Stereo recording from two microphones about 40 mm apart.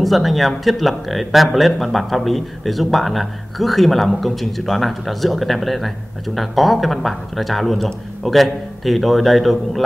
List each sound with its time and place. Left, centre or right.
0.0 s speech: centre